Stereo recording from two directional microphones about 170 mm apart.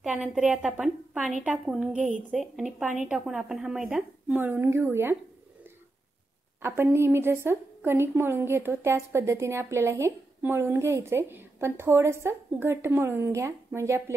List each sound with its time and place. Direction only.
0.0 s a woman's voice: 5° right (ahead or behind)
6.6 s a woman's voice: 15° right (ahead or behind)